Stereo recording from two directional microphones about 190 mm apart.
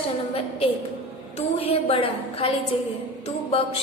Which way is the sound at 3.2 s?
30° left (ahead or behind).